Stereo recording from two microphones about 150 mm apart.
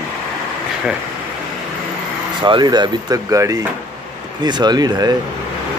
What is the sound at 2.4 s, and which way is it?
Speech, 30° right (ahead or behind).